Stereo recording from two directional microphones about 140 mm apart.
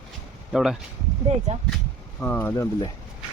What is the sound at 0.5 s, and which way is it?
Speech, centre (ahead or behind).